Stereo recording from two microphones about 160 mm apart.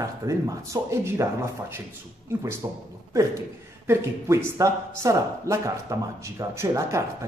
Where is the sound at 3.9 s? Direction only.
15° right (ahead or behind).